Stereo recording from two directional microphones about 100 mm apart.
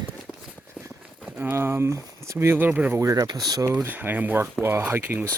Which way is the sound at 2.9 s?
35° right (ahead or behind).